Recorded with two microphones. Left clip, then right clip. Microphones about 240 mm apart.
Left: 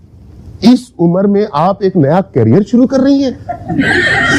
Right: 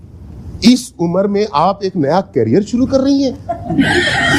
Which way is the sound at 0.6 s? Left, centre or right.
Left.